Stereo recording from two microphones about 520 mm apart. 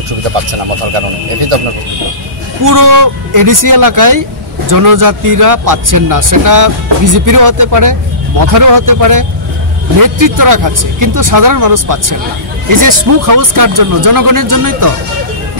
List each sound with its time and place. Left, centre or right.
0.5 s speech: right
2.6 s speech: right